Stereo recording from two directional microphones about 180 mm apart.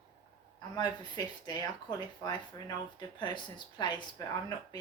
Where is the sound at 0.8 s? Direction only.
25° left (ahead or behind).